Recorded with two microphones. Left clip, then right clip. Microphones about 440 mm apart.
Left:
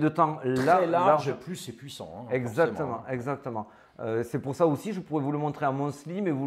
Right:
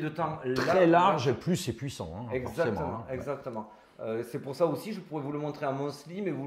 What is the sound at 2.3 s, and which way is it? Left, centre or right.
Speech, left.